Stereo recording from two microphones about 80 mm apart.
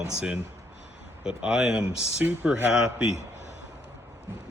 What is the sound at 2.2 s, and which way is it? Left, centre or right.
Speech, right.